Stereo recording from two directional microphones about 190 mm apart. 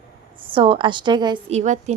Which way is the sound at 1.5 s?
40° right (ahead or behind).